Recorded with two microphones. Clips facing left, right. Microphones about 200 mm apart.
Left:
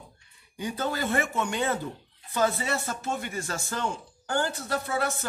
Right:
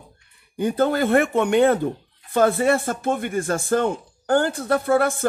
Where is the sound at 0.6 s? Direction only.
55° right (ahead or behind).